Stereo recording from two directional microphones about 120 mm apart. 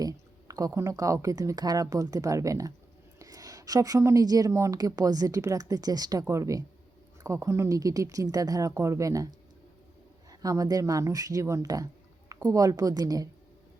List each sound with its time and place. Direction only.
0.0 s a woman's voice: 30° right (ahead or behind)